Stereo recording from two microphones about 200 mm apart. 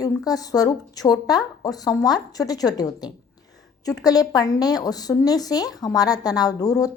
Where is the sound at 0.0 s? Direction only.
20° left (ahead or behind).